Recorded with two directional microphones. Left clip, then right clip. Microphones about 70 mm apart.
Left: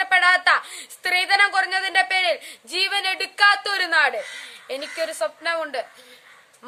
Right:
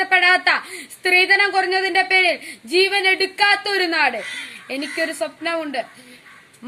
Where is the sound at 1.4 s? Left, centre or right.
Left.